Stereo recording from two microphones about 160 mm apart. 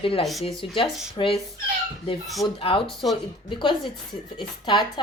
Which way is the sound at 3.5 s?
30° left (ahead or behind).